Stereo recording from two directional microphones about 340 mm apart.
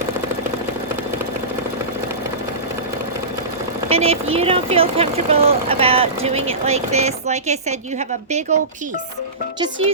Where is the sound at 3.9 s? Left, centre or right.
Centre.